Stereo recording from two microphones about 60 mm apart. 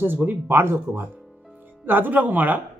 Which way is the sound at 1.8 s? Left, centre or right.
Right.